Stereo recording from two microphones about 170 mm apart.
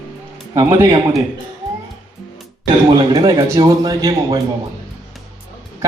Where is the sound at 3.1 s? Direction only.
25° right (ahead or behind).